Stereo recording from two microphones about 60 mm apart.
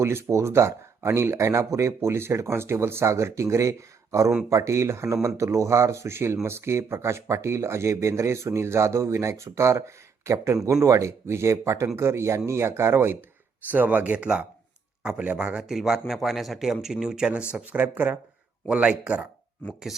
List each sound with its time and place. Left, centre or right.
0.0 s speech: right
13.7 s speech: right
15.6 s speech: centre; by 18.2 s right
18.7 s speech: centre